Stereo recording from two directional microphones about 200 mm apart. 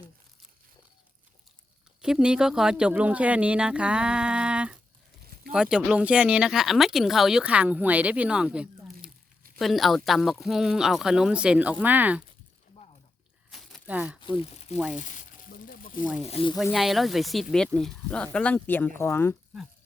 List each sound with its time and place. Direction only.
2.0 s speech: 5° right (ahead or behind)
13.5 s crunch: centre (ahead or behind)
14.2 s speech: 25° left (ahead or behind)
14.9 s a sound: 40° left (ahead or behind)
16.2 s speech: 30° left (ahead or behind)
16.7 s speech: centre (ahead or behind)